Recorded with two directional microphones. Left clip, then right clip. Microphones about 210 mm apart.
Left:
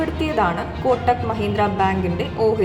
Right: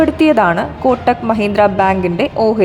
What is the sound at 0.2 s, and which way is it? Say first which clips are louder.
A woman's voice: right 9 dB; 50° right (ahead or behind).